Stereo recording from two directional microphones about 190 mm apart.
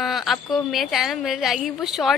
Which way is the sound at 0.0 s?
Centre (ahead or behind).